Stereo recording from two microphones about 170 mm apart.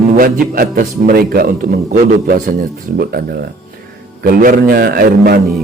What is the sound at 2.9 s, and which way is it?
Speech, 65° right (ahead or behind).